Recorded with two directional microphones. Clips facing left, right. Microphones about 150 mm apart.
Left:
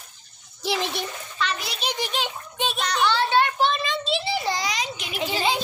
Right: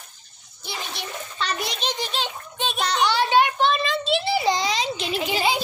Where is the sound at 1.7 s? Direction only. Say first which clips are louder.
Even; 10° left (ahead or behind).